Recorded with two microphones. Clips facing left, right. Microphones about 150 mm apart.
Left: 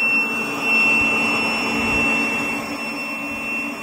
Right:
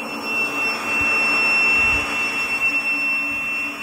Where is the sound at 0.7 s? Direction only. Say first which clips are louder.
Left 4 dB; 15° left (ahead or behind); by 2.1 s 35° left (ahead or behind).